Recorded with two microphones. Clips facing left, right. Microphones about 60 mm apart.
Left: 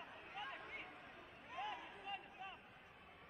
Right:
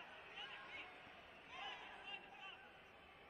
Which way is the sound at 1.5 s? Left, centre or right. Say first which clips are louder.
Left 6 dB; left.